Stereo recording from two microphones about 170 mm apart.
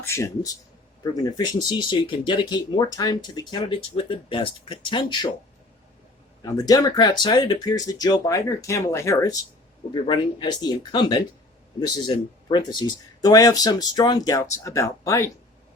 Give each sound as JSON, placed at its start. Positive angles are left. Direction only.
{"t": 0.0, "sound": "speech", "side_deg": 15}
{"t": 6.4, "sound": "speech", "side_deg": 20}